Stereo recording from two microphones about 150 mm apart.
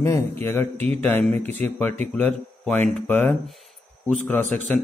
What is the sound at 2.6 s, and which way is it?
Speech, 10° left (ahead or behind).